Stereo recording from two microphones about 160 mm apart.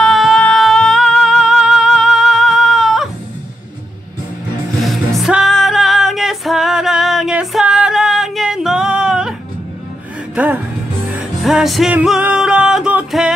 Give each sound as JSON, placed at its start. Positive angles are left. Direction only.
{"t": 0.0, "sound": "music", "side_deg": 0}
{"t": 4.7, "sound": "music", "side_deg": 0}
{"t": 10.3, "sound": "music", "side_deg": -10}